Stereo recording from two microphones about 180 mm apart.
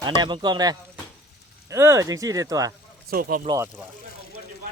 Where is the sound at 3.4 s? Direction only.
20° right (ahead or behind).